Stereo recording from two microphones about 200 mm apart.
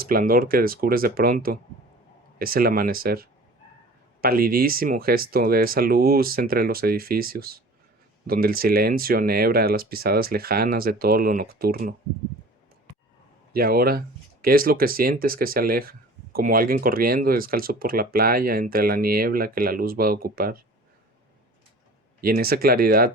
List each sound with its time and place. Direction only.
0.0 s speech: 45° right (ahead or behind)
13.5 s speech: 50° right (ahead or behind)
22.2 s speech: 50° right (ahead or behind)